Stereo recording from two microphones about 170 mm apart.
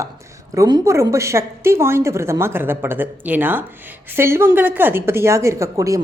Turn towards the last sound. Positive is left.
turn(degrees=-20)  # may be behind; listen again after turning